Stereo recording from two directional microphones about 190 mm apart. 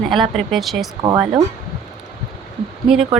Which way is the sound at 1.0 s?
25° right (ahead or behind).